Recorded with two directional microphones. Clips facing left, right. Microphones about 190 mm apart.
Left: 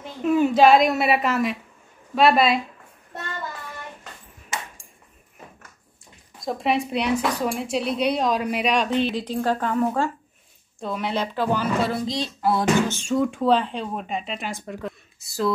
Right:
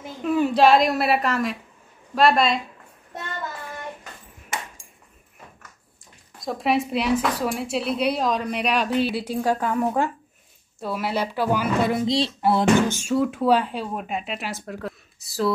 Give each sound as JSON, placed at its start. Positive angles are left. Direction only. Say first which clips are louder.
{"t": 0.2, "sound": "speech", "louder": "left 1 dB", "side_deg": 0}
{"t": 6.4, "sound": "a woman's voice", "louder": "right 1 dB", "side_deg": 0}
{"t": 12.8, "sound": "speech", "louder": "right 1 dB", "side_deg": -10}